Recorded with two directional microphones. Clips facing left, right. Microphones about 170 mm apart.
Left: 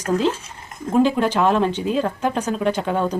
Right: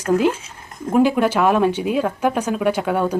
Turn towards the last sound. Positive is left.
turn(degrees=-10)  # may be behind; listen again after turning